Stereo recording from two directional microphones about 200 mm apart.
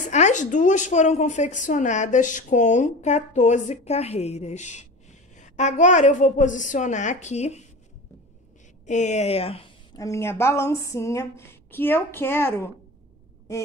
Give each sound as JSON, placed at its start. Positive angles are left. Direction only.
{"t": 0.0, "sound": "a woman's voice", "side_deg": 35}
{"t": 8.8, "sound": "a woman's voice", "side_deg": 35}
{"t": 9.9, "sound": "speech", "side_deg": 15}